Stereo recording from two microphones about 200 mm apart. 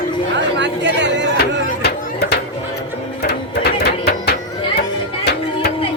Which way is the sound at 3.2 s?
55° left (ahead or behind).